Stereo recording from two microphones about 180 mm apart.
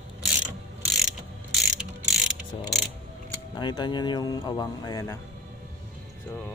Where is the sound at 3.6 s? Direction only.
25° left (ahead or behind).